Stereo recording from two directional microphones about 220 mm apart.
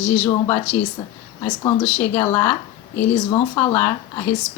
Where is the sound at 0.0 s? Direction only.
5° left (ahead or behind).